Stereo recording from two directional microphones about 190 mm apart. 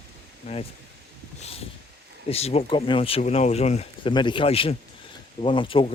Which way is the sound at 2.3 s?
30° left (ahead or behind).